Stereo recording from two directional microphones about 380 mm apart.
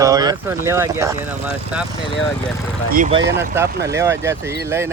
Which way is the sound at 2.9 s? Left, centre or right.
Right.